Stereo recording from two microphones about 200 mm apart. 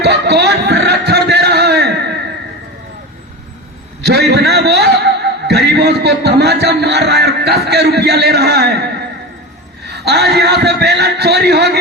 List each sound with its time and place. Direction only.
0.0 s a sound: 55° right (ahead or behind)
4.0 s a man's voice: 55° right (ahead or behind)
10.4 s speech: 55° right (ahead or behind)